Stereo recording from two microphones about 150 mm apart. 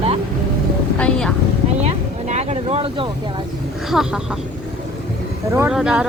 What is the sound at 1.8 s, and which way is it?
Speech, 45° right (ahead or behind).